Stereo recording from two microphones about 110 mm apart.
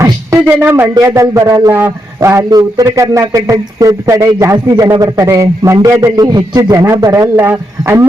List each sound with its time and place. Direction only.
0.3 s speech: 15° right (ahead or behind)
0.9 s a man's voice: 25° right (ahead or behind)
7.3 s a man's voice: 25° right (ahead or behind)